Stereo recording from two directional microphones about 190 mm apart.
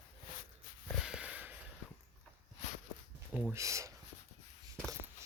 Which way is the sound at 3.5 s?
15° right (ahead or behind).